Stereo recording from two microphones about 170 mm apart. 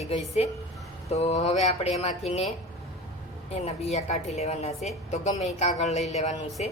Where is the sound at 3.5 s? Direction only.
40° left (ahead or behind).